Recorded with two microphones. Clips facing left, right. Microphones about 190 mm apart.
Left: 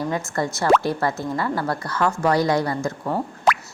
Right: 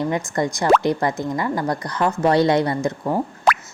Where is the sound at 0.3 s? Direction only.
15° right (ahead or behind).